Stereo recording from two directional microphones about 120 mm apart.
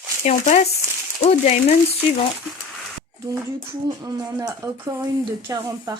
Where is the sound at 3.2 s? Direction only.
30° right (ahead or behind).